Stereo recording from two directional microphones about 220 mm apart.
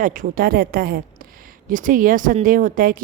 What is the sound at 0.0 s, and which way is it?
A woman's voice, 35° right (ahead or behind).